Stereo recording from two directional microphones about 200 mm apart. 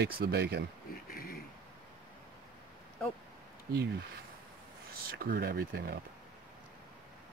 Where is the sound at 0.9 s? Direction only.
50° left (ahead or behind).